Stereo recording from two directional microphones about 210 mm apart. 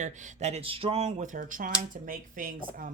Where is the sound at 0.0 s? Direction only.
35° right (ahead or behind).